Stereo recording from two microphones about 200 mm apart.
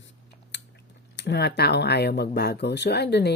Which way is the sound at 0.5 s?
60° left (ahead or behind).